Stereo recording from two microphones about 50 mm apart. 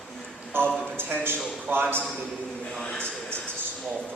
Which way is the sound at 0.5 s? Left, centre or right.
Right.